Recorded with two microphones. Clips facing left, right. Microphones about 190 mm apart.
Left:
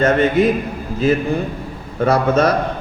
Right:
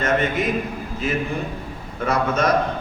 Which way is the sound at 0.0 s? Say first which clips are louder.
Left 7 dB; 35° left (ahead or behind).